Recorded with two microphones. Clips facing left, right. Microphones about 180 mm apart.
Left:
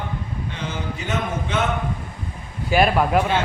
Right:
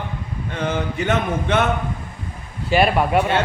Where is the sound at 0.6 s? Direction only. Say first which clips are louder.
Right 10 dB; 60° right (ahead or behind).